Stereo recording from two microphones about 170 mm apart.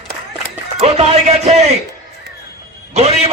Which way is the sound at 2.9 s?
40° right (ahead or behind).